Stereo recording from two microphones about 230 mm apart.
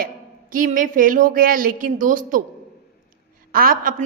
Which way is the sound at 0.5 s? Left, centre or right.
Right.